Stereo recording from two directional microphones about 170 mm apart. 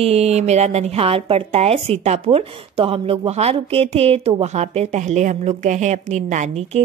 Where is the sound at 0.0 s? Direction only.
35° right (ahead or behind).